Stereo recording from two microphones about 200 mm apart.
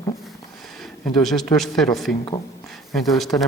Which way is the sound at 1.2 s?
Centre (ahead or behind).